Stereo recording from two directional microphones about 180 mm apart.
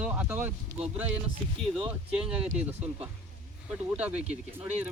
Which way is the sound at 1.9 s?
5° right (ahead or behind).